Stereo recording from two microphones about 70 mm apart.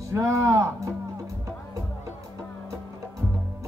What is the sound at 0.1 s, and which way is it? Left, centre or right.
Speech, right.